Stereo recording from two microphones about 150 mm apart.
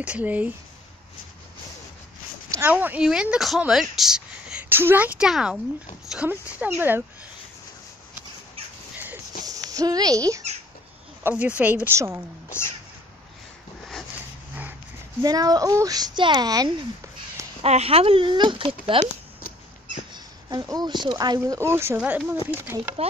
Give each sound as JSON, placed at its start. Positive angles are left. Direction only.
{"t": 0.0, "sound": "speech", "side_deg": -10}
{"t": 2.5, "sound": "speech", "side_deg": -15}
{"t": 9.4, "sound": "speech", "side_deg": -25}
{"t": 11.2, "sound": "speech", "side_deg": -10}
{"t": 12.4, "sound": "speech", "side_deg": 15}
{"t": 15.2, "sound": "speech", "side_deg": -25}
{"t": 17.6, "sound": "speech", "side_deg": -45}
{"t": 20.4, "sound": "speech", "side_deg": -25}